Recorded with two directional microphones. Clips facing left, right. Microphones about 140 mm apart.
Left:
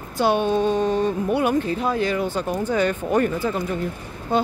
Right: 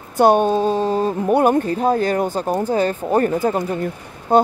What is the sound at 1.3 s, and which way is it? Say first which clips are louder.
Speech: right 9 dB; 45° right (ahead or behind).